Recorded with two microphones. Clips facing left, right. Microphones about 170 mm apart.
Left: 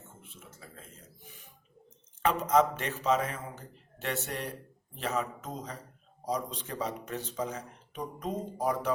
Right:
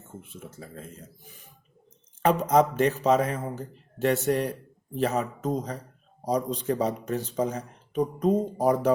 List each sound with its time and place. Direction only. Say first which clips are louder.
2.2 s speech: right 4 dB; 40° right (ahead or behind)